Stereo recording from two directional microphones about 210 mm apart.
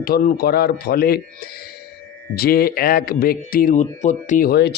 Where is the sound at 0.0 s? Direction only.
45° left (ahead or behind).